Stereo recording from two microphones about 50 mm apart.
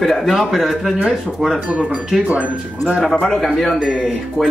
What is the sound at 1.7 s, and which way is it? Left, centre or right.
Speech, right.